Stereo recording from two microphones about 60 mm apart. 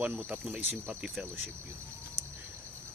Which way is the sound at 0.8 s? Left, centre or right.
Centre.